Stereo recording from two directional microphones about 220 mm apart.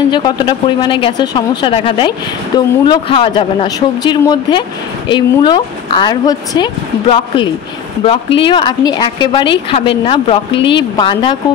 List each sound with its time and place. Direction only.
0.1 s speech: 20° left (ahead or behind)